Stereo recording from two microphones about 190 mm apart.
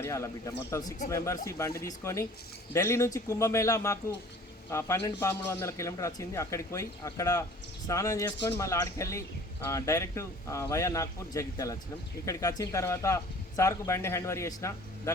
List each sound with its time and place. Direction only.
0.0 s a man's voice: 15° left (ahead or behind)